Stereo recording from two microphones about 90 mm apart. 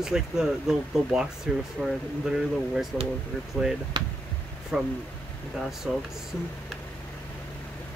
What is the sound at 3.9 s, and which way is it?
Speech, 55° right (ahead or behind).